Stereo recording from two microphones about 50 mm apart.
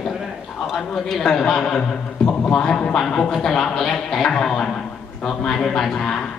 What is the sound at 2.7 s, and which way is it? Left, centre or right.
Speech, centre.